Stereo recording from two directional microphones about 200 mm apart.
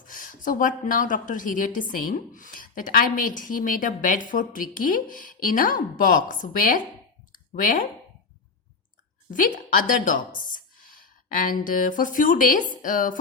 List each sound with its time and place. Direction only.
0.0 s a sound: 40° left (ahead or behind)
0.9 s speech: 40° left (ahead or behind)
7.3 s clicking: 45° left (ahead or behind)
9.3 s speech: 45° left (ahead or behind)